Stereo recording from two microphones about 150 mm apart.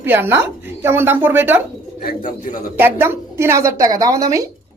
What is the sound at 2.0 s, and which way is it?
Speech, 70° left (ahead or behind).